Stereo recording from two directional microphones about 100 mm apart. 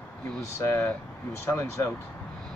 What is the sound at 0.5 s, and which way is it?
Speech, 30° left (ahead or behind).